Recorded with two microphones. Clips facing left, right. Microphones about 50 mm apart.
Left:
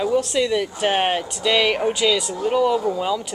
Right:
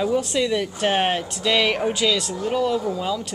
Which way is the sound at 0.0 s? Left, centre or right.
Centre.